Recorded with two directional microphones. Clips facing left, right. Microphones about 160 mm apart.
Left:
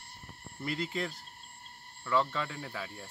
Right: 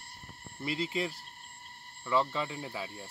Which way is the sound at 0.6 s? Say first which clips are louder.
Right 2 dB; 5° right (ahead or behind).